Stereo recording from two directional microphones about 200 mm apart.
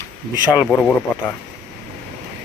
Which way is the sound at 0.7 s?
10° left (ahead or behind).